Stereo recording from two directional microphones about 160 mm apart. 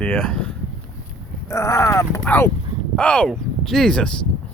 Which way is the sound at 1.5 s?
20° left (ahead or behind).